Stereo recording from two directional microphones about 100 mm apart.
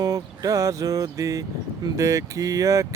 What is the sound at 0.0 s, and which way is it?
Speech, 35° right (ahead or behind).